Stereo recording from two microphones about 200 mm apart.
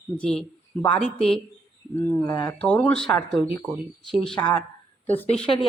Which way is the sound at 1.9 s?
10° left (ahead or behind).